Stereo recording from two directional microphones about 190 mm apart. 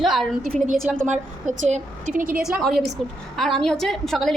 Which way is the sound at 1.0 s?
40° right (ahead or behind).